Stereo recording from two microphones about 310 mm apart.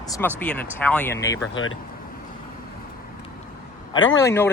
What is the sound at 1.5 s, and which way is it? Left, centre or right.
Speech, left.